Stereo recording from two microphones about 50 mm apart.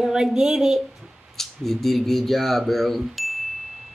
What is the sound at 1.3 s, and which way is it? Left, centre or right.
Speech, centre.